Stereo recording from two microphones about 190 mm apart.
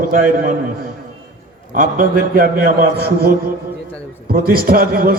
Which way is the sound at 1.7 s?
45° right (ahead or behind).